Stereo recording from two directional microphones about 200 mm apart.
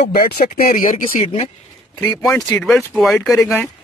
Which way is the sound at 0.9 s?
35° left (ahead or behind).